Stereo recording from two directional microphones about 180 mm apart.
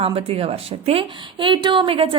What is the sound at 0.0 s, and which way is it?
A woman's voice, 30° right (ahead or behind).